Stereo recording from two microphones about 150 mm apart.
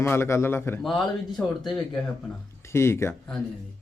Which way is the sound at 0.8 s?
Centre (ahead or behind).